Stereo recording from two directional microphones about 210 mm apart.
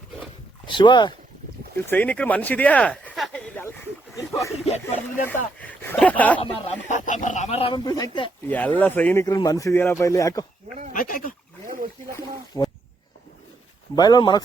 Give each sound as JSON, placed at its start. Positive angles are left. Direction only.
{"t": 0.6, "sound": "speech", "side_deg": 20}
{"t": 1.9, "sound": "a sound", "side_deg": 5}
{"t": 4.6, "sound": "speech", "side_deg": 30}
{"t": 5.3, "sound": "speech", "side_deg": 10}
{"t": 6.4, "sound": "speech", "side_deg": 30}
{"t": 8.4, "sound": "speech", "side_deg": 10}
{"t": 10.9, "sound": "speech", "side_deg": 40}
{"t": 12.1, "sound": "a sound", "side_deg": 15}
{"t": 13.9, "sound": "speech", "side_deg": 20}